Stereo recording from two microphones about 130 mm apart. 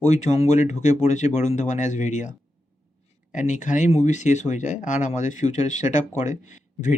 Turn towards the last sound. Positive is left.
turn(degrees=70)  # may be behind; listen again after turning